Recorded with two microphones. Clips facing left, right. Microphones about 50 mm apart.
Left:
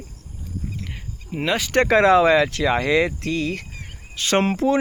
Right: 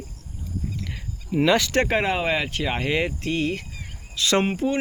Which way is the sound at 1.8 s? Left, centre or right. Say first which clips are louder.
Left 8 dB; left.